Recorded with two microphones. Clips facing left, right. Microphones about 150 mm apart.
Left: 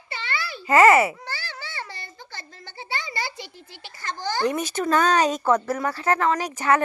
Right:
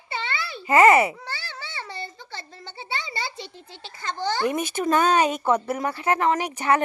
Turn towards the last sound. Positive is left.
turn(degrees=-15)  # may be behind; listen again after turning